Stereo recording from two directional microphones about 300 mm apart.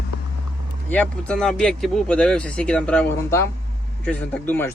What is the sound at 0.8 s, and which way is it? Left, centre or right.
Speech, centre.